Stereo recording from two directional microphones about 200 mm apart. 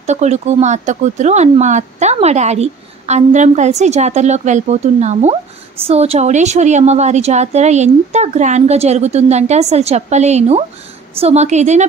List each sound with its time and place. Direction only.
0.0 s speech: 35° right (ahead or behind)